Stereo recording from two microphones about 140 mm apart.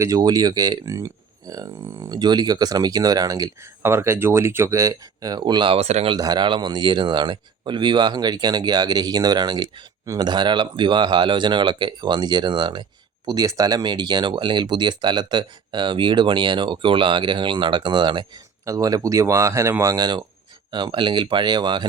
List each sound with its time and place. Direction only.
0.0 s speech: 25° right (ahead or behind); by 6.1 s 50° right (ahead or behind)
6.1 s speech: 30° right (ahead or behind)